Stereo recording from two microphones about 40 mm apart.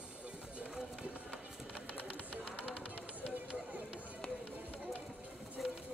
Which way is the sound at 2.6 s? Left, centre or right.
Right.